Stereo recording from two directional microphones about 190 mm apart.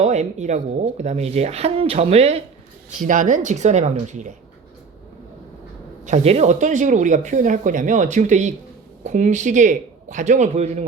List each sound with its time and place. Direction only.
0.0 s speech: 40° right (ahead or behind)
6.1 s speech: 35° right (ahead or behind)